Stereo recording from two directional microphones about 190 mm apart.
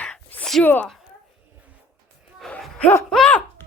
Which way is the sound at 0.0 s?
5° left (ahead or behind).